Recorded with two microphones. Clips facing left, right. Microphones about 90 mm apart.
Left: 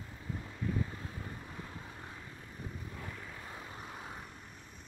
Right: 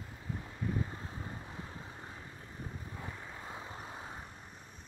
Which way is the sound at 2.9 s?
20° right (ahead or behind).